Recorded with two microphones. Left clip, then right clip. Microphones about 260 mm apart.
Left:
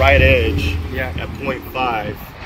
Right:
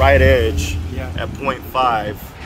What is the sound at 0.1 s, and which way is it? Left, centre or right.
Speech, right.